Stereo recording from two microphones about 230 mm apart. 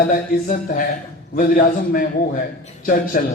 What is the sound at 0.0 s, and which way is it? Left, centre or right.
A man's voice, left.